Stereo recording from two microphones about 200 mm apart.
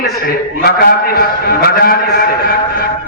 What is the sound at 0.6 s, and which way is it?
A man's voice, 50° left (ahead or behind).